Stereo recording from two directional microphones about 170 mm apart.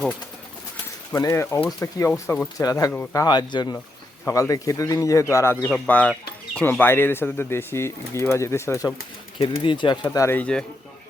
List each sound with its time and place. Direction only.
1.1 s speech: 15° left (ahead or behind)
5.6 s speech: 5° left (ahead or behind)
9.6 s speech: 30° left (ahead or behind); by 10.7 s 5° left (ahead or behind)